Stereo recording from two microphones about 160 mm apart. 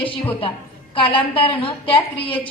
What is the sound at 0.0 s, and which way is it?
A woman's voice, 35° left (ahead or behind).